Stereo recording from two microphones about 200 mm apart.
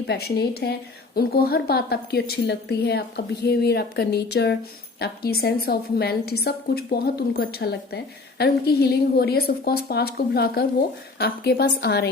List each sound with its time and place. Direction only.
0.1 s a woman's voice: 55° left (ahead or behind)